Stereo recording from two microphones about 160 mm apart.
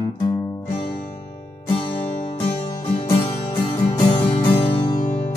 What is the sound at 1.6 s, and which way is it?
Music, 35° left (ahead or behind).